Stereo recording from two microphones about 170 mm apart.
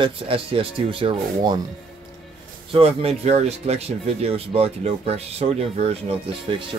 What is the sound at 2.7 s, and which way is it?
Speech, 35° right (ahead or behind).